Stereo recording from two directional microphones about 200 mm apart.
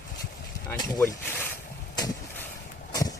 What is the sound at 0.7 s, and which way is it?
Speech, 10° left (ahead or behind).